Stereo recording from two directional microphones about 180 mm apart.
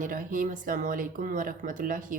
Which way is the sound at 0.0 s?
50° right (ahead or behind).